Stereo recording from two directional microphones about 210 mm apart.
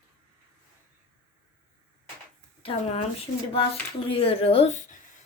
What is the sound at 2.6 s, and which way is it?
Speech, 25° left (ahead or behind).